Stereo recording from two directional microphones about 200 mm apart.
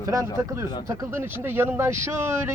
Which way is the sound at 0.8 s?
15° right (ahead or behind).